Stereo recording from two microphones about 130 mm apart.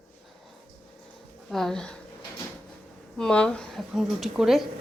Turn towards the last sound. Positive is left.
turn(degrees=0)  # may be behind; listen again after turning